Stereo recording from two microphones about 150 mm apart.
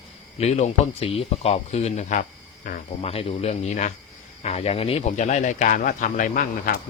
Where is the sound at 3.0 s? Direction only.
40° left (ahead or behind); by 6.7 s 65° left (ahead or behind).